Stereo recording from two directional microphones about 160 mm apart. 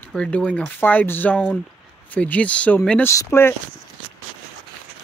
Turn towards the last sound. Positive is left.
turn(degrees=15)  # may be behind; listen again after turning